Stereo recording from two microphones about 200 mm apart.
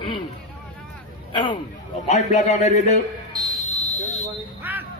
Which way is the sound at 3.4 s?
Centre (ahead or behind).